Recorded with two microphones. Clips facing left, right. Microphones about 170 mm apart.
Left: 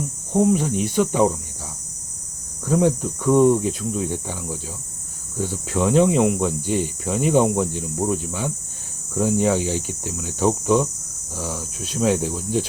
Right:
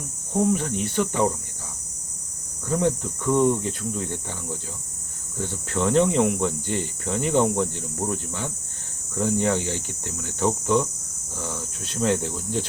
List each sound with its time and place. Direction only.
0.4 s speech: 15° left (ahead or behind)
2.6 s speech: 15° left (ahead or behind)